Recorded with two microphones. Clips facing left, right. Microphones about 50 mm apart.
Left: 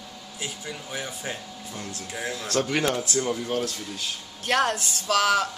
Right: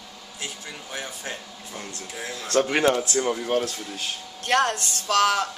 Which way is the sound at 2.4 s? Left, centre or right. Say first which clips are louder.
Right 5 dB; right.